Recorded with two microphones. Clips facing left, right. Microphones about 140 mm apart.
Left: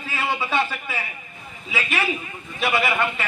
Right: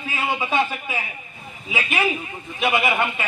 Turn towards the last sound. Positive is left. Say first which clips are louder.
# right 1 dB
turn(degrees=-15)  # may be behind; listen again after turning